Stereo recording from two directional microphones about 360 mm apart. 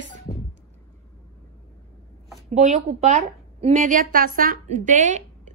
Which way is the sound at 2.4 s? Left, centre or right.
Centre.